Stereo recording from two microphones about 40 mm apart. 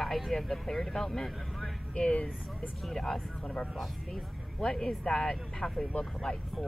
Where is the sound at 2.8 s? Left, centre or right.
Centre.